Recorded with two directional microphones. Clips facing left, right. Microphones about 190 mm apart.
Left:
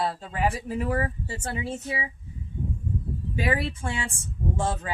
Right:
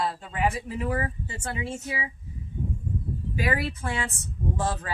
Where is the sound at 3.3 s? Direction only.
25° left (ahead or behind).